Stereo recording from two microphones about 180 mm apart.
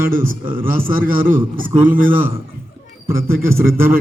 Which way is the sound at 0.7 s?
55° right (ahead or behind).